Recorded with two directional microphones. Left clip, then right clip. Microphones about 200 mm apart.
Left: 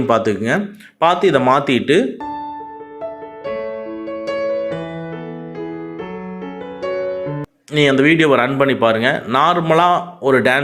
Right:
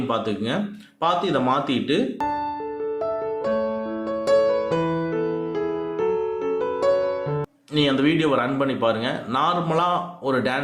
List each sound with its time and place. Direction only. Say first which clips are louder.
0.1 s speech: left 10 dB; 40° left (ahead or behind)
7.8 s speech: left 8 dB; 30° left (ahead or behind)